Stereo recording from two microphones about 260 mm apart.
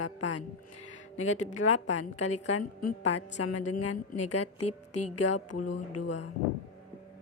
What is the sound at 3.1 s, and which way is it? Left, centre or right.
Music, left.